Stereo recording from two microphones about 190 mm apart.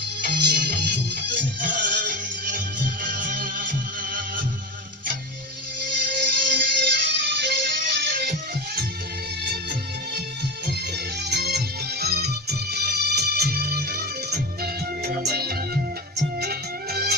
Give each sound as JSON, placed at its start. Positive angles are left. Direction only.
{"t": 0.2, "sound": "music", "side_deg": -60}
{"t": 1.6, "sound": "music", "side_deg": -45}
{"t": 6.1, "sound": "music", "side_deg": -45}
{"t": 6.9, "sound": "music", "side_deg": -65}